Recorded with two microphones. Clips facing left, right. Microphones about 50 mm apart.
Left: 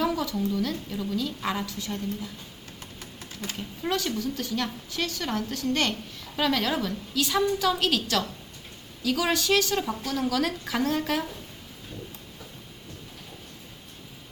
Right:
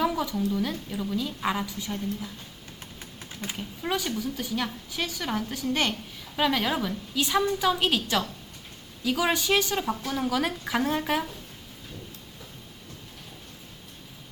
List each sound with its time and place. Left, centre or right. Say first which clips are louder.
0.0 s a woman's voice: even; centre
3.6 s a woman's voice: left 1 dB; centre